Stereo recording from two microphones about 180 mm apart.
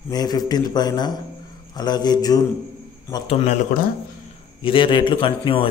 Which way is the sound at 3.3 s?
35° left (ahead or behind).